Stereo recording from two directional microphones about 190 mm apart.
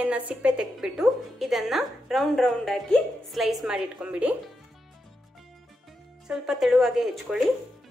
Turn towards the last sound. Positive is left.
turn(degrees=0)  # may be behind; listen again after turning